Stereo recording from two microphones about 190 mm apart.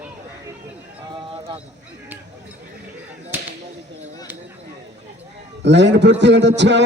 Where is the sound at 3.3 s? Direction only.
10° right (ahead or behind).